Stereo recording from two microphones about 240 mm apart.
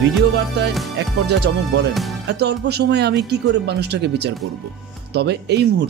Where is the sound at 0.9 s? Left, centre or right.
Right.